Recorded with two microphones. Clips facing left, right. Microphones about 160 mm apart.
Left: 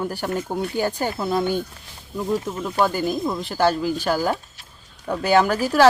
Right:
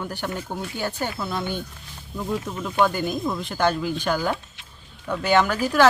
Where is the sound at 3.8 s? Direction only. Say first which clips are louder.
Left 2 dB; 40° left (ahead or behind).